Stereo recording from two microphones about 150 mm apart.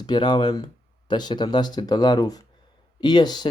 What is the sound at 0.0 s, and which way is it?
Speech, 30° left (ahead or behind).